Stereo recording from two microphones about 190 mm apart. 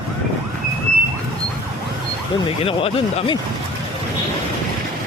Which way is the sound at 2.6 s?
30° left (ahead or behind).